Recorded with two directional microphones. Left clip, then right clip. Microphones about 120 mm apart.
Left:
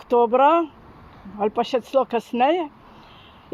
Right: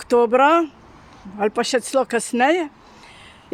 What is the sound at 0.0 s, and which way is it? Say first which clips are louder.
Speech: right 1 dB; 70° right (ahead or behind).